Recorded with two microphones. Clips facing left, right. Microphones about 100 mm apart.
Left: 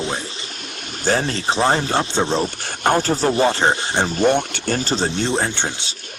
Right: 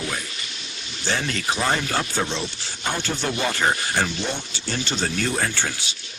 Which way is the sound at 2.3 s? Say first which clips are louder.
Left 8 dB; 50° left (ahead or behind).